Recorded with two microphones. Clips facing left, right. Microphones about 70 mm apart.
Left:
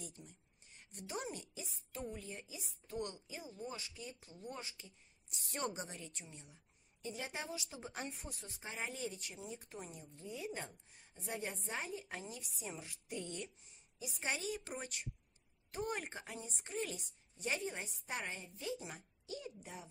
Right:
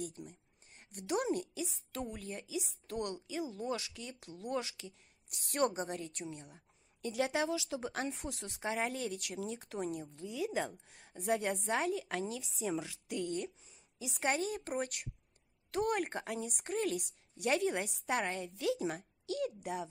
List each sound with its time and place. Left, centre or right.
0.0 s speech: right
0.9 s speech: right
1.6 s a woman's voice: right
5.7 s speech: right
7.0 s a woman's voice: right
10.9 s a woman's voice: right
14.3 s speech: right
16.3 s a woman's voice: right